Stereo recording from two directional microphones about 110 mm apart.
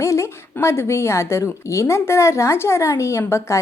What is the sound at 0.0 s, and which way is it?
A woman's voice, 25° left (ahead or behind).